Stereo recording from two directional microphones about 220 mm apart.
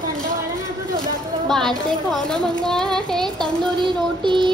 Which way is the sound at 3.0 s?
Centre (ahead or behind).